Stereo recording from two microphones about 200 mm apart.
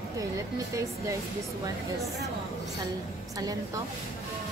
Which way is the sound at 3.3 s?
15° right (ahead or behind).